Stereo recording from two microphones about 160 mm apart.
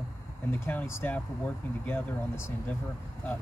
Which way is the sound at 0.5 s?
10° left (ahead or behind).